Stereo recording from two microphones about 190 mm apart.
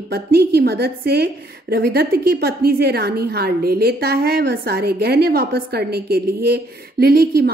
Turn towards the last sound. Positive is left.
turn(degrees=-55)  # may be behind; listen again after turning